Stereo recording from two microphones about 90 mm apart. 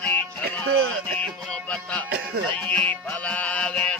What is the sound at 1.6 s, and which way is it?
Music, 15° left (ahead or behind).